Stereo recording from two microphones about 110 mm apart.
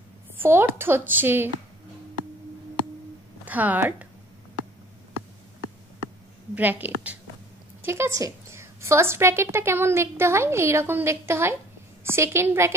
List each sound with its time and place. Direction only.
0.4 s a woman's voice: 20° right (ahead or behind)
3.4 s a woman's voice: 15° right (ahead or behind)
6.5 s a woman's voice: 15° right (ahead or behind)